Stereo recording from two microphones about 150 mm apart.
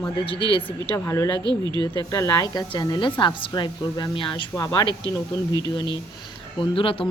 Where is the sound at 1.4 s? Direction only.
30° right (ahead or behind).